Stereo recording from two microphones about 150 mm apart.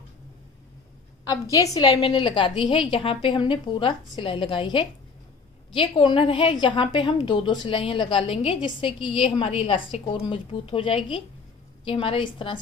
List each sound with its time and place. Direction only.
1.3 s a woman's voice: 25° left (ahead or behind)